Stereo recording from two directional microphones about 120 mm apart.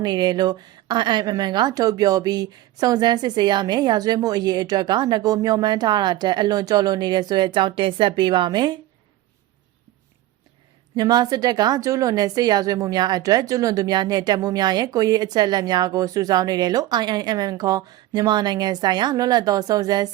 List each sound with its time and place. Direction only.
0.0 s a woman's voice: 35° right (ahead or behind)
10.9 s a woman's voice: 35° right (ahead or behind)